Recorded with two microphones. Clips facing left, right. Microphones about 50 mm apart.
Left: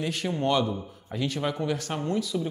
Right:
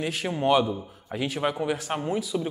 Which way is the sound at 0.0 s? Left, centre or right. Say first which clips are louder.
Right 1 dB; centre.